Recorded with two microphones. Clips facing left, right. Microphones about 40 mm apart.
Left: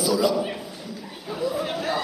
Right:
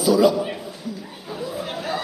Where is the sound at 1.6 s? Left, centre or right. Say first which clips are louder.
Left 1 dB; left.